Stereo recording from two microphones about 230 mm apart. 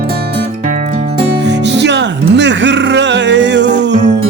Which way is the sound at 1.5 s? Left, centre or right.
Right.